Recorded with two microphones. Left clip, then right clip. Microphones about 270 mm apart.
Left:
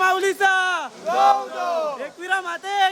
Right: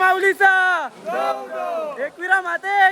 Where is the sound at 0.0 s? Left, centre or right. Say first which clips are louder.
Right 3 dB; centre.